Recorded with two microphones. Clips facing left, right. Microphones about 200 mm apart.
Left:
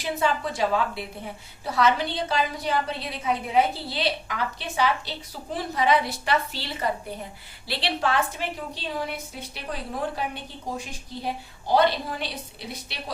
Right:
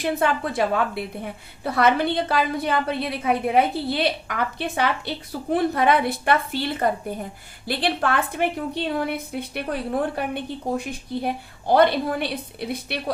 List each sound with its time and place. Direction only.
0.0 s a woman's voice: 55° right (ahead or behind)